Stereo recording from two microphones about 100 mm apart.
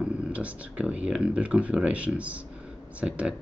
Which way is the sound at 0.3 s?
15° right (ahead or behind).